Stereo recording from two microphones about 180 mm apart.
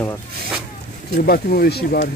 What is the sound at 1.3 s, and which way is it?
Speech, 60° left (ahead or behind).